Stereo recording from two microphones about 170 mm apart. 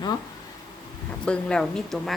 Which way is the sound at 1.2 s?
5° left (ahead or behind).